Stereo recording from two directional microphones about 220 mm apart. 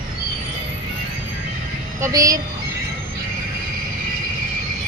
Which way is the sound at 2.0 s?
15° right (ahead or behind).